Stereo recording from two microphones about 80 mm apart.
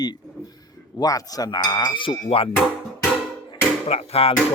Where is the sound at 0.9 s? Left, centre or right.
Left.